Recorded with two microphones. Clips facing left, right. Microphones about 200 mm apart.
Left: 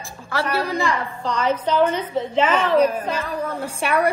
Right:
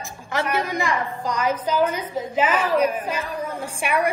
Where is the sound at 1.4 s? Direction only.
30° left (ahead or behind).